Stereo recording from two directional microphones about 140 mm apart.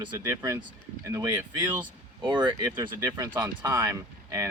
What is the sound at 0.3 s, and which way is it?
Speech, 20° right (ahead or behind).